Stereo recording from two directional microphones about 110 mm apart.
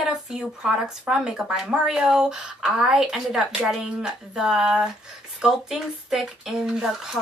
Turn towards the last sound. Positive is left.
turn(degrees=-5)  # may be behind; listen again after turning